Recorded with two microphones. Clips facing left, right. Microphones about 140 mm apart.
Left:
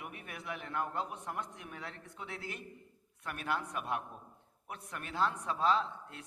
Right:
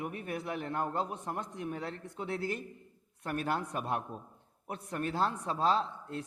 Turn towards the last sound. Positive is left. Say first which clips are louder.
# right 2 dB
turn(degrees=-35)  # may be behind; listen again after turning